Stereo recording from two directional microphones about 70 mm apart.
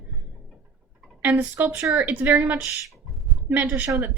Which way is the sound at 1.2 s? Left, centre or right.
Right.